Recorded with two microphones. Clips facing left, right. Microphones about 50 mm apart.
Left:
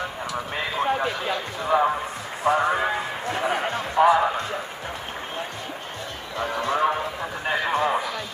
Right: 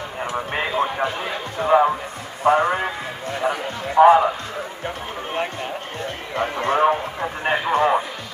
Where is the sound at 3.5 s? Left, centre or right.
Left.